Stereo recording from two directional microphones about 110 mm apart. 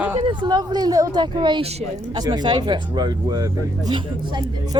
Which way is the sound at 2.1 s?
40° right (ahead or behind).